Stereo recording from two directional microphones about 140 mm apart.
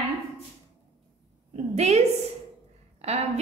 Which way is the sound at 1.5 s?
50° right (ahead or behind).